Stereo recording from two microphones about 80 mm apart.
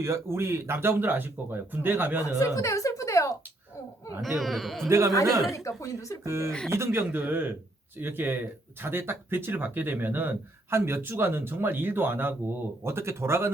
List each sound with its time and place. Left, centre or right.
0.0 s speech: right
2.2 s a sound: left
4.2 s speech: centre
4.9 s speech: right
5.5 s speech: left
6.2 s speech: right